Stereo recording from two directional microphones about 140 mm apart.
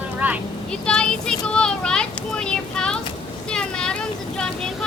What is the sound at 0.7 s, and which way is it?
Speech, 5° left (ahead or behind).